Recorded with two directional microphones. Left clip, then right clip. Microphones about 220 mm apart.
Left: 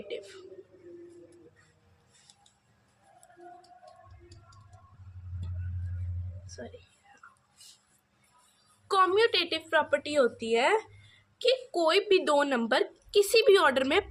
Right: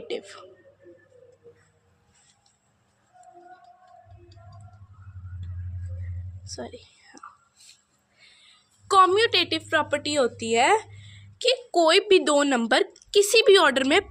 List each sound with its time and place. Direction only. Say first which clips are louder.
6.4 s whispering: right 8 dB; 45° right (ahead or behind)
8.9 s a woman's voice: right 6 dB; 45° right (ahead or behind)